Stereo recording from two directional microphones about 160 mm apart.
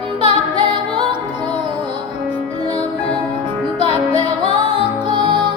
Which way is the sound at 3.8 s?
40° left (ahead or behind).